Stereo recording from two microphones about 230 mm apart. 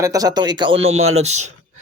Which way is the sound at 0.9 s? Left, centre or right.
Right.